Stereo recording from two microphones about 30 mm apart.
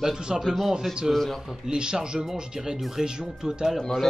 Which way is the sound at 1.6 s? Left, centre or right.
Right.